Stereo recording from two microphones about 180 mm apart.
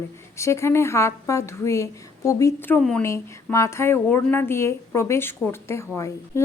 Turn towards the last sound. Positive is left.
turn(degrees=15)  # may be behind; listen again after turning